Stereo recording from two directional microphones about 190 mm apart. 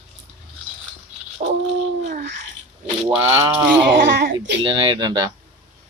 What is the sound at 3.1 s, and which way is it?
Speech, 15° right (ahead or behind).